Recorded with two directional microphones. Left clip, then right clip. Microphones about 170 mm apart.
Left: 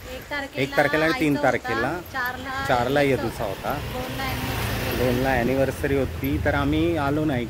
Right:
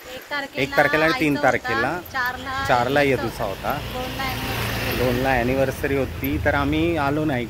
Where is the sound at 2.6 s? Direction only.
Centre (ahead or behind).